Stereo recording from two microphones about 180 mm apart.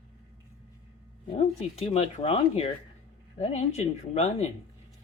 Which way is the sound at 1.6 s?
35° left (ahead or behind).